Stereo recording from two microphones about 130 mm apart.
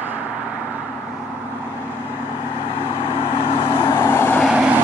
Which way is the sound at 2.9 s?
25° left (ahead or behind).